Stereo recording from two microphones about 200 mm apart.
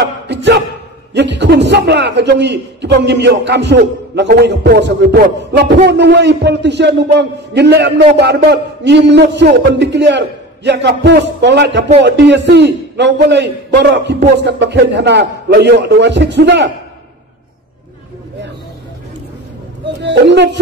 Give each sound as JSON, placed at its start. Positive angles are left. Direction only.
{"t": 0.0, "sound": "a sound", "side_deg": -60}
{"t": 1.1, "sound": "a man's voice", "side_deg": -60}
{"t": 20.0, "sound": "speech", "side_deg": -60}